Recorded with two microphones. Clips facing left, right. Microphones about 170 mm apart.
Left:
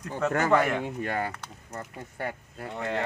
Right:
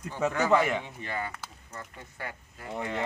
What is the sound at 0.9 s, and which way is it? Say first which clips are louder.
Speech: left 5 dB; 50° left (ahead or behind).